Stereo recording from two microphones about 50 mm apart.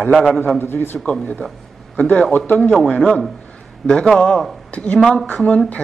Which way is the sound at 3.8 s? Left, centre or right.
Centre.